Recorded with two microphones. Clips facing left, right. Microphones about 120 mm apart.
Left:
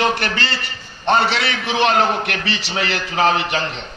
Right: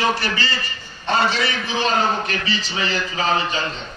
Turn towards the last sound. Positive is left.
turn(degrees=80)